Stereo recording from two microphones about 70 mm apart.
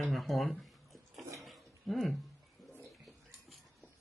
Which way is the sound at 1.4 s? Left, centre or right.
Centre.